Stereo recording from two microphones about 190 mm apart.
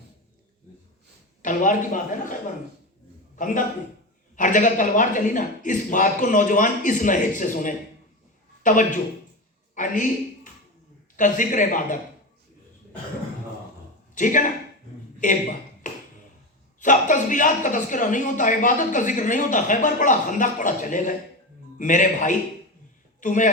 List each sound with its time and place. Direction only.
1.4 s a man's voice: 45° left (ahead or behind)
14.2 s a man's voice: 45° left (ahead or behind)
16.8 s a man's voice: 40° left (ahead or behind)